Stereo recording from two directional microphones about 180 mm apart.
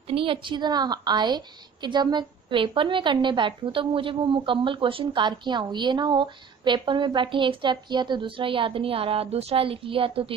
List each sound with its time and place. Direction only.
0.1 s a woman's voice: 30° right (ahead or behind)